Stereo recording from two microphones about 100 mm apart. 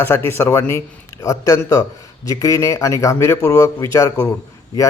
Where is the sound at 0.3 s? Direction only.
25° left (ahead or behind).